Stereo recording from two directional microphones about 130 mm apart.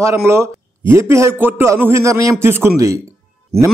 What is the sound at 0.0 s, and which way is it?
A man's voice, 20° right (ahead or behind).